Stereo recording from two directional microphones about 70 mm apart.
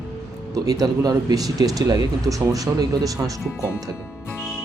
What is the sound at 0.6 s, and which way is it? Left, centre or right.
Speech, right.